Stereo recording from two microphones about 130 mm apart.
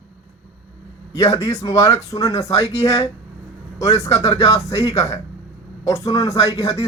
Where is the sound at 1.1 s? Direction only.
25° left (ahead or behind).